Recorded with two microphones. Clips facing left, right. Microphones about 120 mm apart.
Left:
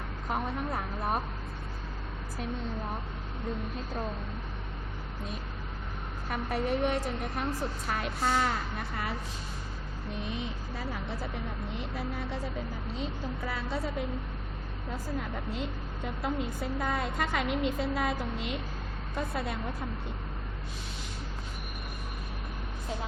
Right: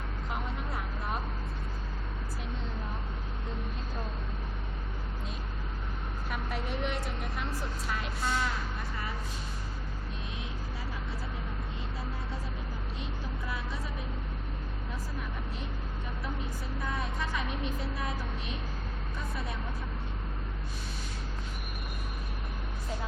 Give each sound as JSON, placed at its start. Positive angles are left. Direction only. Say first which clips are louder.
{"t": 0.3, "sound": "vehicle", "louder": "left 6 dB", "side_deg": 50}
{"t": 6.3, "sound": "a woman's voice", "louder": "left 7 dB", "side_deg": 45}
{"t": 7.9, "sound": "speech", "louder": "left 3 dB", "side_deg": 60}
{"t": 13.4, "sound": "vehicle", "louder": "left 6 dB", "side_deg": 70}
{"t": 16.2, "sound": "a woman's voice", "louder": "left 8 dB", "side_deg": 90}
{"t": 19.1, "sound": "speech", "louder": "left 7 dB", "side_deg": 75}